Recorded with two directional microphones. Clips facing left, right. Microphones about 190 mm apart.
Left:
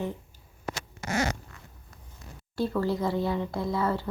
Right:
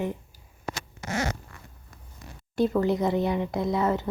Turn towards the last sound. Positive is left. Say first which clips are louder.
# right 3 dB
turn(degrees=-20)  # may be behind; listen again after turning